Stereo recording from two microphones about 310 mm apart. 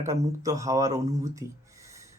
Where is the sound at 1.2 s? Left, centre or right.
Centre.